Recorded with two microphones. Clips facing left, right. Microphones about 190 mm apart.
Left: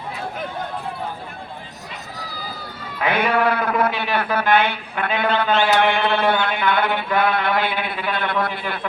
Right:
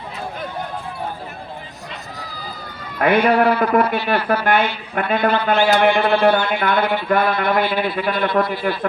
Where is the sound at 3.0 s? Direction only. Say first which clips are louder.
Right 5 dB; 55° right (ahead or behind).